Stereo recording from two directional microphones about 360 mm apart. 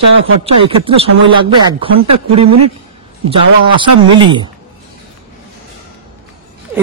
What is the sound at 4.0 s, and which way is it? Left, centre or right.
Speech, centre.